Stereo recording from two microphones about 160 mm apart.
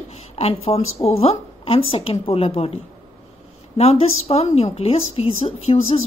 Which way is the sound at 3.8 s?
40° left (ahead or behind).